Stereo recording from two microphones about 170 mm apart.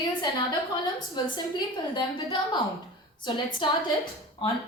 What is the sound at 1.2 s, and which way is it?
A woman's voice, 25° left (ahead or behind).